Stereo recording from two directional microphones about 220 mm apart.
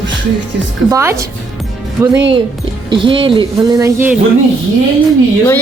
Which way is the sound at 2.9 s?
25° right (ahead or behind).